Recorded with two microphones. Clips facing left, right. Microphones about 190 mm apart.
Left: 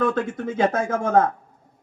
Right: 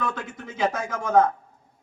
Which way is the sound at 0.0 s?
50° left (ahead or behind).